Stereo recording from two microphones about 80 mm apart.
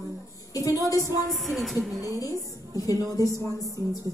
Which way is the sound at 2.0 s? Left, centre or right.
Left.